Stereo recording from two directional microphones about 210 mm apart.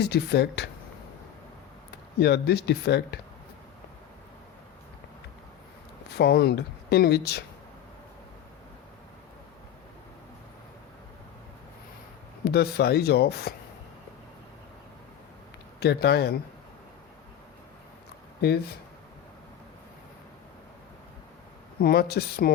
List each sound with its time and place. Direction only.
0.0 s speech: 50° left (ahead or behind)
2.1 s speech: 50° left (ahead or behind)
6.1 s speech: 50° left (ahead or behind)
12.5 s speech: 50° left (ahead or behind)
15.8 s speech: 50° left (ahead or behind)
21.8 s speech: 45° left (ahead or behind)